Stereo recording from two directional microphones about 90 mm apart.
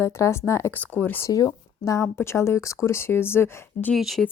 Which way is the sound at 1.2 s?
40° left (ahead or behind).